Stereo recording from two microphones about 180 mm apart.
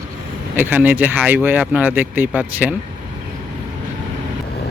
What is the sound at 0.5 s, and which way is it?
Speech, 10° right (ahead or behind).